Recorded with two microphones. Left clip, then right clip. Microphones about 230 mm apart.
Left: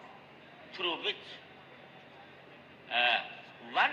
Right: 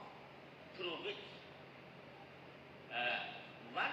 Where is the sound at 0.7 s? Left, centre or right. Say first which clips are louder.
Left 10 dB; left.